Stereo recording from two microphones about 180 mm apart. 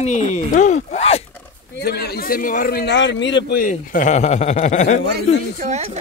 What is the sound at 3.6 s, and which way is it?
Speech, 45° left (ahead or behind).